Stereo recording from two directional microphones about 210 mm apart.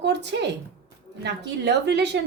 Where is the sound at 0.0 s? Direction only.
55° right (ahead or behind).